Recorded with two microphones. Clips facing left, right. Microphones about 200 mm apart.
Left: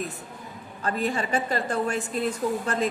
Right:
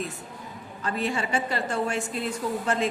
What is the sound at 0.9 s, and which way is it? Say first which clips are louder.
A woman's voice: left 1 dB; 40° left (ahead or behind).